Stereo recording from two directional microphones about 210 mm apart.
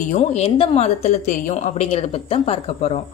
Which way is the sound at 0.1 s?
30° left (ahead or behind).